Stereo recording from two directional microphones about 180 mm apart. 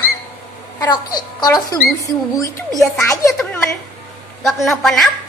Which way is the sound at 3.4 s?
5° left (ahead or behind).